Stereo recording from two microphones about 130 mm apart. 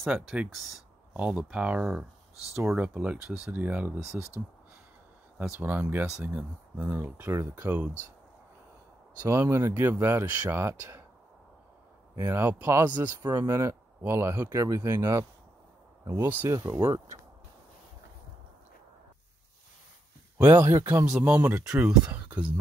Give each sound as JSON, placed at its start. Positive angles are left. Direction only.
{"t": 0.0, "sound": "speech", "side_deg": -5}
{"t": 5.6, "sound": "speech", "side_deg": -15}
{"t": 9.2, "sound": "speech", "side_deg": -20}
{"t": 12.2, "sound": "speech", "side_deg": -20}
{"t": 20.3, "sound": "speech", "side_deg": -15}